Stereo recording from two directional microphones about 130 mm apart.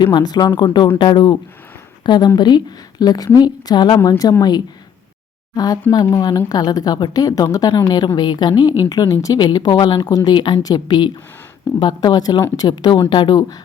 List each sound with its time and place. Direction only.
0.0 s a woman's voice: 35° left (ahead or behind)